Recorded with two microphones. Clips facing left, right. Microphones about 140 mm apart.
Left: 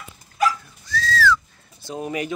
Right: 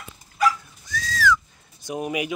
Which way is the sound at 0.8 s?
15° right (ahead or behind).